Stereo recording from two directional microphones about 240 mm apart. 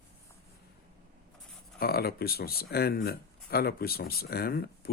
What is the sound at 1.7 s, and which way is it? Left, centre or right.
Speech, left.